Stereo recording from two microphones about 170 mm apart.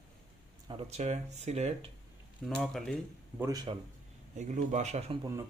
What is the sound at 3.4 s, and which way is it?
Speech, 20° right (ahead or behind).